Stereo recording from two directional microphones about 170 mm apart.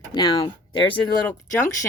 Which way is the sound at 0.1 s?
20° left (ahead or behind).